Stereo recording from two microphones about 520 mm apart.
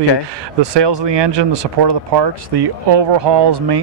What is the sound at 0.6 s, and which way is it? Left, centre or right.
Speech, right.